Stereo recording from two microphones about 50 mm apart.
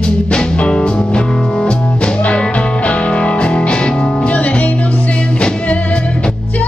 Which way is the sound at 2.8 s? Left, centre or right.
Centre.